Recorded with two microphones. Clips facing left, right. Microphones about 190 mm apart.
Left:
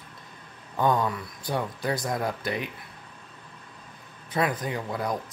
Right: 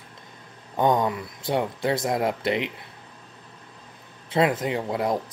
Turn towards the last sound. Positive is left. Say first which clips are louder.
# right 5 dB
turn(degrees=-25)  # may be behind; listen again after turning